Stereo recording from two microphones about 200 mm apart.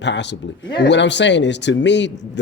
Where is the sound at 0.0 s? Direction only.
60° left (ahead or behind).